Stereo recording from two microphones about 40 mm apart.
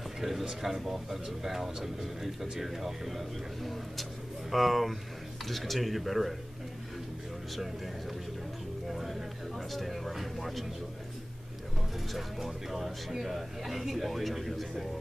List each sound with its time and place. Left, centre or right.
0.2 s speech: centre
7.5 s speech: centre
12.1 s speech: centre